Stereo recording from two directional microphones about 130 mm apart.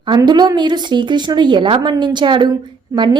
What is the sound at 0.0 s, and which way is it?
A woman's voice, 35° right (ahead or behind).